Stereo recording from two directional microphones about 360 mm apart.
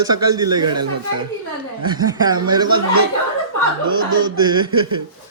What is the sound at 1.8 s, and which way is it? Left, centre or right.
Speech, centre.